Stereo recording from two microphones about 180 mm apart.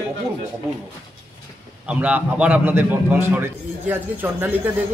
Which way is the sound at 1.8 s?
5° right (ahead or behind).